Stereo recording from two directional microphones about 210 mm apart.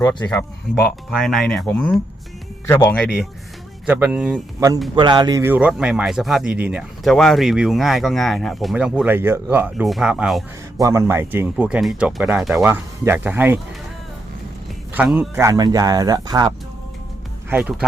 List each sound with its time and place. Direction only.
0.0 s speech: 20° left (ahead or behind)
1.1 s speech: centre (ahead or behind)
4.9 s speech: 20° right (ahead or behind); by 10.4 s 5° right (ahead or behind)
10.8 s speech: 15° right (ahead or behind)
14.9 s speech: 10° right (ahead or behind)
17.5 s speech: 5° right (ahead or behind)